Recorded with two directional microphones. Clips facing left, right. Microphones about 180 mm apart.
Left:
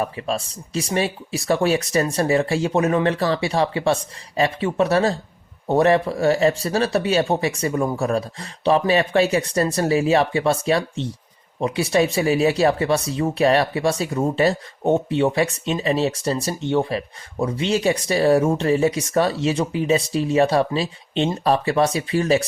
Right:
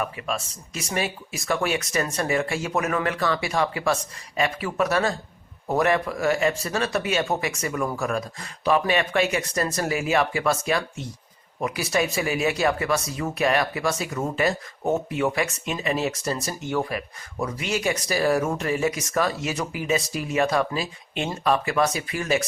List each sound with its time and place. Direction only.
0.0 s speech: 30° left (ahead or behind)